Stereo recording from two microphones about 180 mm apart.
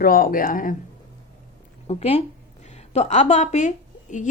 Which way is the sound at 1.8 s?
35° left (ahead or behind).